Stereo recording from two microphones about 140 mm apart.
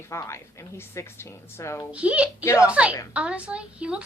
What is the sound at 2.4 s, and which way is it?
Speech, 20° left (ahead or behind).